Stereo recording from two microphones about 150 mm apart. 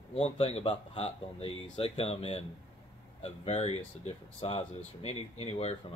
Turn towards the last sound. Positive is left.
turn(degrees=45)  # may be behind; listen again after turning